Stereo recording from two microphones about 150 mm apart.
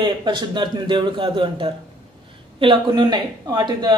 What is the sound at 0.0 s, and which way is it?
Speech, 30° right (ahead or behind).